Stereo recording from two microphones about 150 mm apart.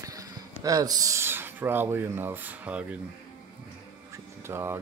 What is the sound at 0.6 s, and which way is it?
Speech, 25° right (ahead or behind).